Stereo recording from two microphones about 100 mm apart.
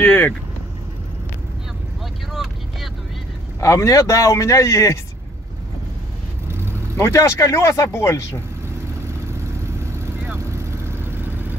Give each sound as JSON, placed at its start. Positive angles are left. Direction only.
{"t": 0.0, "sound": "speech", "side_deg": 20}
{"t": 2.3, "sound": "vehicle", "side_deg": 0}
{"t": 3.6, "sound": "speech", "side_deg": 30}
{"t": 7.0, "sound": "speech", "side_deg": 30}
{"t": 10.9, "sound": "vehicle", "side_deg": -25}